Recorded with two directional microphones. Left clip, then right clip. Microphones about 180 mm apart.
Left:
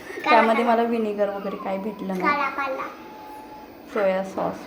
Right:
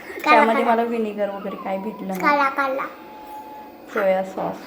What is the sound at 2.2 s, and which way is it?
Speech, 70° right (ahead or behind).